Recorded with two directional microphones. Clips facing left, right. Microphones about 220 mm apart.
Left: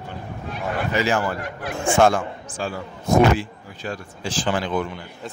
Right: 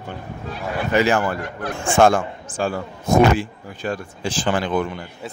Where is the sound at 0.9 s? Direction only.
60° right (ahead or behind).